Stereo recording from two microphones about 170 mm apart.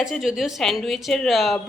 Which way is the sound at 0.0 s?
Centre (ahead or behind).